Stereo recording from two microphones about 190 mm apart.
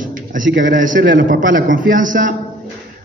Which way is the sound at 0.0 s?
45° right (ahead or behind).